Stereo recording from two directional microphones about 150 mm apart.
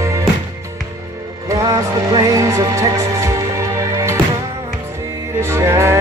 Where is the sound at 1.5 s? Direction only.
20° right (ahead or behind).